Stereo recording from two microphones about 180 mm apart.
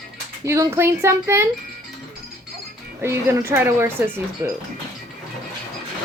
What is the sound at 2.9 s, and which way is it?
A woman's voice, 15° right (ahead or behind).